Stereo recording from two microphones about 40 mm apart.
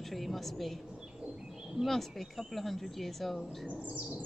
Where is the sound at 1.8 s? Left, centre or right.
Centre.